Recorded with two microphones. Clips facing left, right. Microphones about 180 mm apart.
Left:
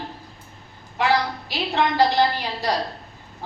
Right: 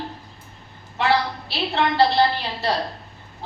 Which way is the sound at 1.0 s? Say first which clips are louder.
Even; 15° left (ahead or behind).